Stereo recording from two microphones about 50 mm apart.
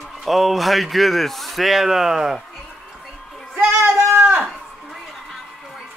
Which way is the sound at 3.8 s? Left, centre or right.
Centre.